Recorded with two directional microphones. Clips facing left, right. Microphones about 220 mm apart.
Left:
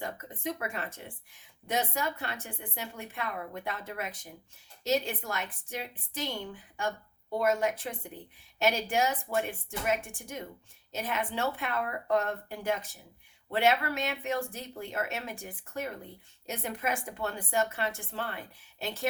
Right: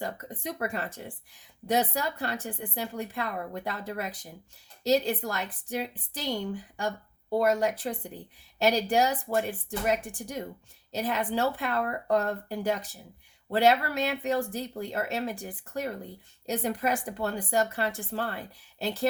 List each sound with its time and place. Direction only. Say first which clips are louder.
0.0 s a woman's voice: right 1 dB; 40° right (ahead or behind)